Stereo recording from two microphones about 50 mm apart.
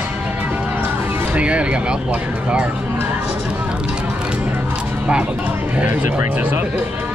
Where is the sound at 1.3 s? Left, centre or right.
Right.